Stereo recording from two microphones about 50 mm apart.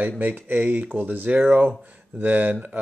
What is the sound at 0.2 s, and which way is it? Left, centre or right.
Speech, right.